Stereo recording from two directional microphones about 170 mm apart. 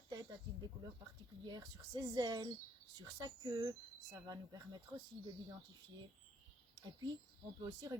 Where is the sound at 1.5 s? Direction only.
25° right (ahead or behind).